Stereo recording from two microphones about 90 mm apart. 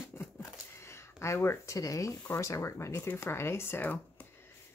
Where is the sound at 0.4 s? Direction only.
30° left (ahead or behind).